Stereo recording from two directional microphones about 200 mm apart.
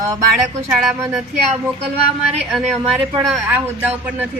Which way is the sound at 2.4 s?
Centre (ahead or behind).